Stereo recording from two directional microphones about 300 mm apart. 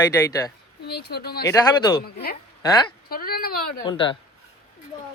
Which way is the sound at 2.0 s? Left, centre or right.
Left.